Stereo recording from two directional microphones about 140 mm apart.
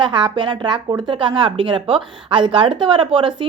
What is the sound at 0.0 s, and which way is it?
A woman's voice, 35° right (ahead or behind).